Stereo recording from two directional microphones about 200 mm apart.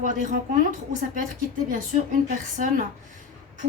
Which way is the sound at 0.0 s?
40° right (ahead or behind).